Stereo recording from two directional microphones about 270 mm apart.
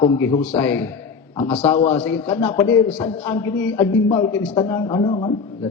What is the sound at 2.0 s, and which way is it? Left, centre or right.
A man's voice, centre.